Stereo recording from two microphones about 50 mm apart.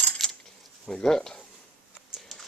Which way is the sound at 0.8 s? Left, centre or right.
Centre.